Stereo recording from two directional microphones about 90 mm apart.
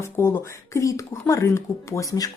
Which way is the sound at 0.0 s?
30° left (ahead or behind).